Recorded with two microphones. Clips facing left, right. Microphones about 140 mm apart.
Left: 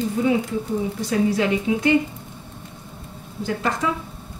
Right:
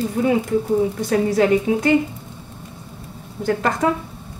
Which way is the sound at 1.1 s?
45° right (ahead or behind).